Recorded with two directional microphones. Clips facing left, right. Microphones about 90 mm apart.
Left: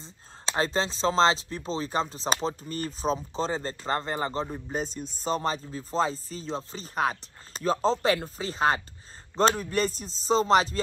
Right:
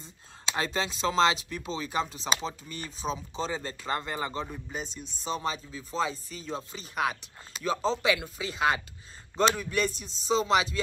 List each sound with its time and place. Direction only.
0.0 s speech: 30° left (ahead or behind)